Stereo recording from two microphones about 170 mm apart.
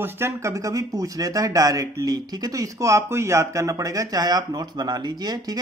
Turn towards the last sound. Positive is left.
turn(degrees=-20)  # may be behind; listen again after turning